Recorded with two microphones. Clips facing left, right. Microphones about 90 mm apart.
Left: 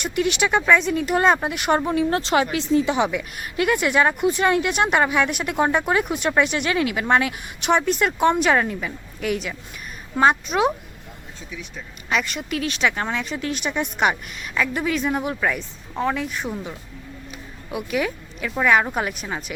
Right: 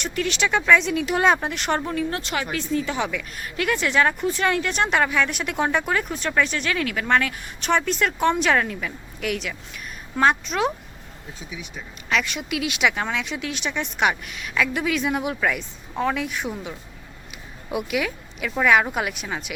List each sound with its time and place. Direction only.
0.0 s speech: 10° left (ahead or behind)
1.9 s speech: 25° left (ahead or behind); by 10.7 s 5° left (ahead or behind)
11.3 s speech: 10° right (ahead or behind)
12.0 s speech: centre (ahead or behind)
17.9 s speech: 5° right (ahead or behind)